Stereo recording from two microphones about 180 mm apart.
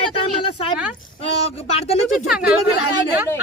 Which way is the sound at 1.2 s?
35° left (ahead or behind).